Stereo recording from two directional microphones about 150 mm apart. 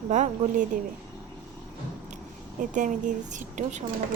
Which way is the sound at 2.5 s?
60° right (ahead or behind).